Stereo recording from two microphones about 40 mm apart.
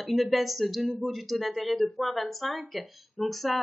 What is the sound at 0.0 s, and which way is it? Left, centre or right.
Speech, centre.